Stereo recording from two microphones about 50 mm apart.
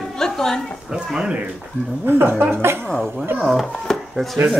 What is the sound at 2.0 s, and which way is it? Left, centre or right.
Speech, right.